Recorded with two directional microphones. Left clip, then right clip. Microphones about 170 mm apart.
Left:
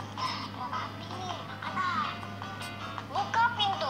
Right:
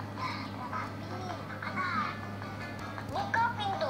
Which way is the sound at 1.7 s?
50° left (ahead or behind).